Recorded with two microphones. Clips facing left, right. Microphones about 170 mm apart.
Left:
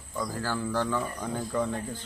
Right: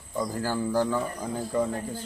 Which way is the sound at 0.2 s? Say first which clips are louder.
Right 3 dB; 15° right (ahead or behind).